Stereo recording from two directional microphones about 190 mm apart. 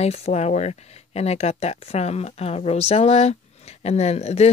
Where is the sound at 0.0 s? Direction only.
35° left (ahead or behind).